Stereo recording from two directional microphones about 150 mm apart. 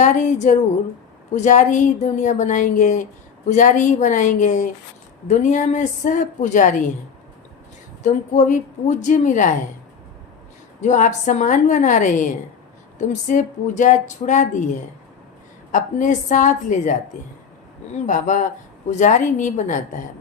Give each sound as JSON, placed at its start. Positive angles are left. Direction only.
{"t": 0.0, "sound": "a woman's voice", "side_deg": 55}
{"t": 8.0, "sound": "a woman's voice", "side_deg": 55}
{"t": 10.8, "sound": "a woman's voice", "side_deg": 55}